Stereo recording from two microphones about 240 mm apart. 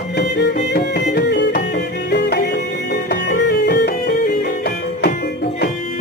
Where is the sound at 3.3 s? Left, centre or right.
Left.